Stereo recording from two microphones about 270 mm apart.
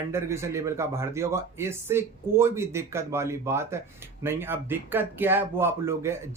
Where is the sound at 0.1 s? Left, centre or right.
Centre.